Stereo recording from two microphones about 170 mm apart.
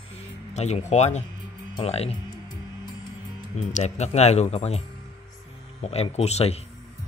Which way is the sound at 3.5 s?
45° left (ahead or behind).